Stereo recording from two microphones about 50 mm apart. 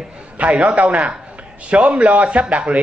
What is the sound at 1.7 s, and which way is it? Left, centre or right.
A man's voice, right.